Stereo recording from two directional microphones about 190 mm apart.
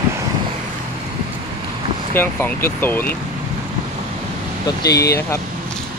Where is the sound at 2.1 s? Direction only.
10° left (ahead or behind).